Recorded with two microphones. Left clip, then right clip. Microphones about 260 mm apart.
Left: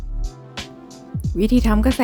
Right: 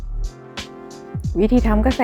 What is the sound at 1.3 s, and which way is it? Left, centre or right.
Speech, centre.